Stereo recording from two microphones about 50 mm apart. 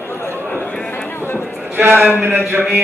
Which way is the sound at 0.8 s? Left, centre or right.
Left.